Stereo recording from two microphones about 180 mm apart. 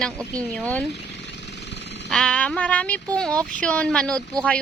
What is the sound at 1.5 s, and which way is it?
Jackhammer, 75° left (ahead or behind).